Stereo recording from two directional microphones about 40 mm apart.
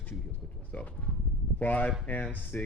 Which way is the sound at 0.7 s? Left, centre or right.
Left.